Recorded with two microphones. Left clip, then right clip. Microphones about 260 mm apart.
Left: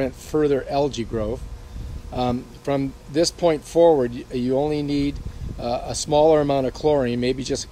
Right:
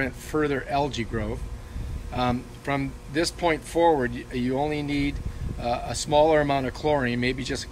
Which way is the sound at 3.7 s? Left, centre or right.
Right.